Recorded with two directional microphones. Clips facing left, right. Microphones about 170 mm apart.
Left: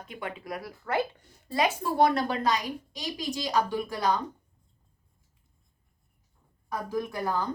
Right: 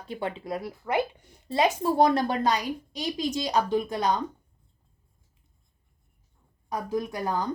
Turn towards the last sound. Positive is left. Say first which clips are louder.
# right 1 dB
turn(degrees=-20)  # may be behind; listen again after turning